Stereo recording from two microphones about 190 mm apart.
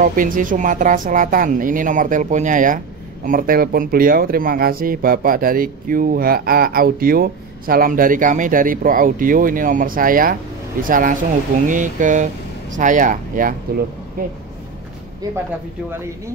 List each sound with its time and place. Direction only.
0.0 s speech: 45° right (ahead or behind)